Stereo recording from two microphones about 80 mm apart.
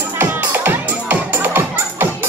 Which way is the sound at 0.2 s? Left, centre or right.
Right.